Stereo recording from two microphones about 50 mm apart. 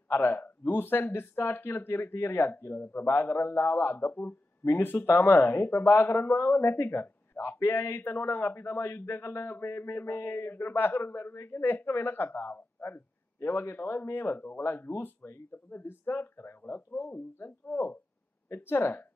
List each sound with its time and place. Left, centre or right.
0.1 s speech: left
3.1 s speech: left
5.1 s speech: left
10.5 s speech: left
14.9 s speech: left
18.5 s speech: left